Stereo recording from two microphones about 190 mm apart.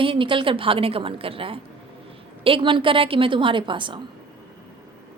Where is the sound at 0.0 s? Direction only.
25° right (ahead or behind).